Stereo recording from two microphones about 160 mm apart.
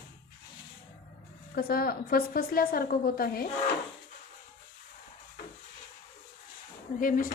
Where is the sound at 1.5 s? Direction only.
70° left (ahead or behind).